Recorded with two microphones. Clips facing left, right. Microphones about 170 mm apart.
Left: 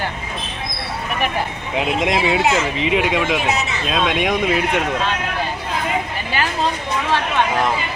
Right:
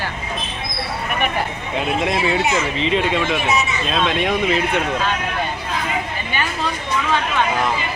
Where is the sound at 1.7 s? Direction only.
15° left (ahead or behind).